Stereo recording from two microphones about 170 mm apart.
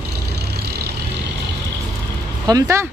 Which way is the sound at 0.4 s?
70° right (ahead or behind).